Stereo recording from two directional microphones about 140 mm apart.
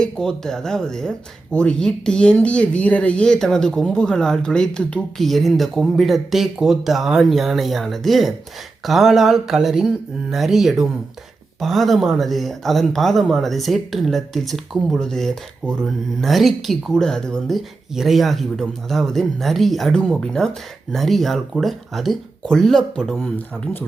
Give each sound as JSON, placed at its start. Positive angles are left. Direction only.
{"t": 0.0, "sound": "speech", "side_deg": 5}